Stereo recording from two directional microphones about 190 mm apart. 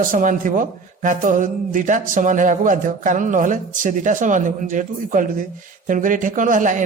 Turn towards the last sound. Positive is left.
turn(degrees=-45)  # may be behind; listen again after turning